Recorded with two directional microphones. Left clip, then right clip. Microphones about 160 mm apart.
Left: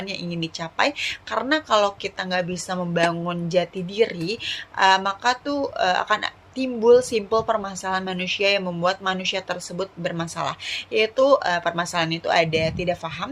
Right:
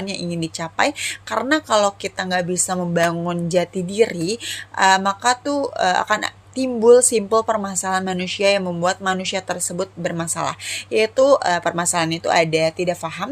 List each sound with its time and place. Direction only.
0.1 s a woman's voice: 55° right (ahead or behind)